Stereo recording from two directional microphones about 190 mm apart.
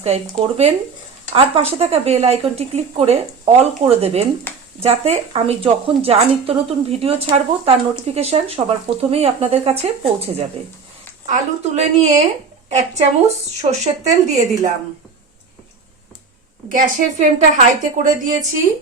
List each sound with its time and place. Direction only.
0.0 s speech: 35° right (ahead or behind)
13.2 s speech: 35° right (ahead or behind)
16.6 s speech: 45° right (ahead or behind)